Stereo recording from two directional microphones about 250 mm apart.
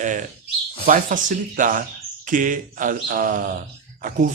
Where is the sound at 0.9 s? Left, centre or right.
Right.